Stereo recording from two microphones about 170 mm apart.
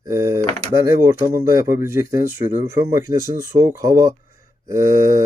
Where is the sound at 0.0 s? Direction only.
15° right (ahead or behind).